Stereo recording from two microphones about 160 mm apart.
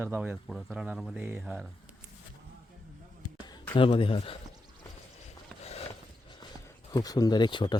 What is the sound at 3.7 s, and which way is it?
Speech, 35° left (ahead or behind).